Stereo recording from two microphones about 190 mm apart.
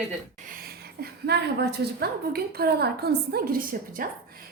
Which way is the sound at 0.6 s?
55° right (ahead or behind).